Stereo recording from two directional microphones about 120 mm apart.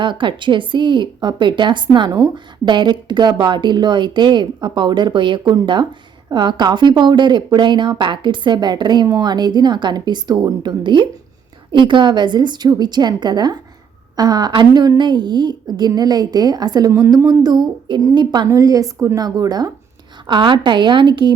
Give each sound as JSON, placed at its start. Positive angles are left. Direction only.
{"t": 0.0, "sound": "speech", "side_deg": -40}
{"t": 16.9, "sound": "speech", "side_deg": -20}
{"t": 18.4, "sound": "a woman's voice", "side_deg": -30}